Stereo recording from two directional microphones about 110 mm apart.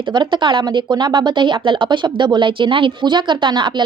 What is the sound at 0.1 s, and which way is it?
Speech, 45° right (ahead or behind).